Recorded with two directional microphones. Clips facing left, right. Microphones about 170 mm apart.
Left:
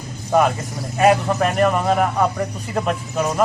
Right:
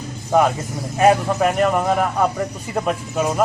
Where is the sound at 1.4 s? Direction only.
5° right (ahead or behind).